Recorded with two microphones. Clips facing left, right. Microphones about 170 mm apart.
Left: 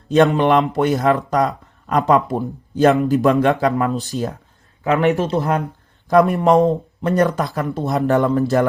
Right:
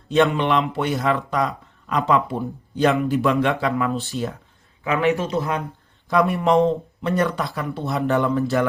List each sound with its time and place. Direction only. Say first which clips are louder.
0.1 s a man's voice: left 4 dB; 40° left (ahead or behind)